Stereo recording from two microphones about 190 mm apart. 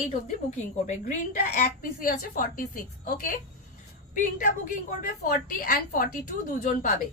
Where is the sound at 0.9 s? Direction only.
40° left (ahead or behind).